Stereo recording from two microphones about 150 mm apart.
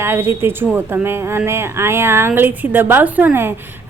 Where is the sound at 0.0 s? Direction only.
15° right (ahead or behind).